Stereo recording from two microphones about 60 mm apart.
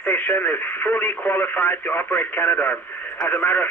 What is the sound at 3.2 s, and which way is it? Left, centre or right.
Speech, left.